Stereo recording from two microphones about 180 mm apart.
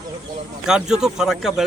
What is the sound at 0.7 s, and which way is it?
Speech, 5° right (ahead or behind).